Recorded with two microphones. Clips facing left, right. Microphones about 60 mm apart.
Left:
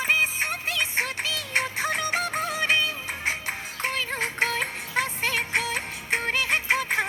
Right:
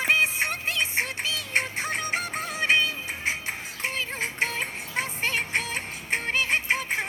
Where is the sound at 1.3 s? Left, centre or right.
Left.